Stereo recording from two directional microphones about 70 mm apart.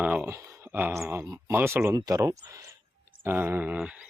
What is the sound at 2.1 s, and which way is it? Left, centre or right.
Speech, right.